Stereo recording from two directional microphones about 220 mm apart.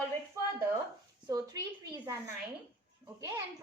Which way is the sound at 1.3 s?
15° right (ahead or behind).